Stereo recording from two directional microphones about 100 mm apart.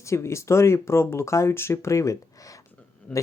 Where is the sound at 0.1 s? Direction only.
30° left (ahead or behind).